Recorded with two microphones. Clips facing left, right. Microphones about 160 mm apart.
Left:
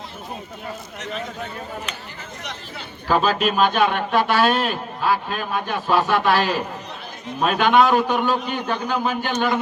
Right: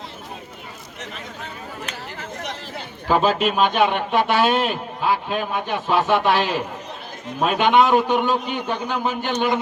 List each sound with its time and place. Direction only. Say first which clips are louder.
3.1 s a man's voice: right 1 dB; 20° right (ahead or behind)
7.6 s a man's voice: even; 20° right (ahead or behind)